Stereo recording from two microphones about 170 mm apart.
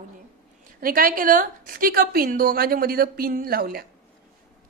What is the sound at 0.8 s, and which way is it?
A woman's voice, 55° right (ahead or behind).